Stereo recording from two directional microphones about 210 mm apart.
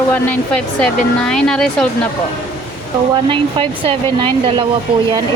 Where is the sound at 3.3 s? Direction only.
25° right (ahead or behind).